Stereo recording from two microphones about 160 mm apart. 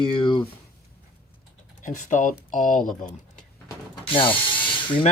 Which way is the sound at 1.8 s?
50° left (ahead or behind).